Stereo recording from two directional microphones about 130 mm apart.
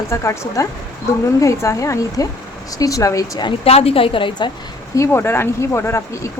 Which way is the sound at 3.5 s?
50° left (ahead or behind).